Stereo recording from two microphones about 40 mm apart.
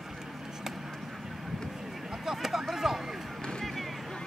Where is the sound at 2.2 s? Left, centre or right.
Centre.